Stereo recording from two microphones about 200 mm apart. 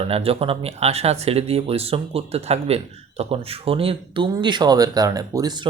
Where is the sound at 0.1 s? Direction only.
30° right (ahead or behind).